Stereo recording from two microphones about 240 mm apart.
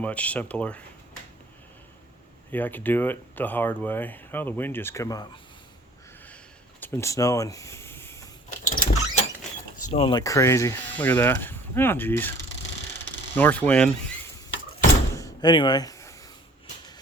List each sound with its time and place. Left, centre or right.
0.0 s speech: centre
2.5 s speech: centre
6.2 s a sound: centre
8.6 s vehicle: left
9.7 s speech: left; by 12.3 s centre
13.3 s speech: centre
15.1 s a sound: centre